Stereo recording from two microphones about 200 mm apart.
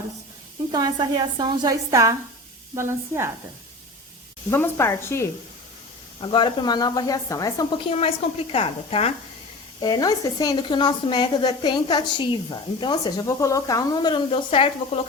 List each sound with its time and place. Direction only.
0.7 s a woman's voice: 20° right (ahead or behind)
4.5 s speech: 10° left (ahead or behind)
6.2 s speech: 25° left (ahead or behind)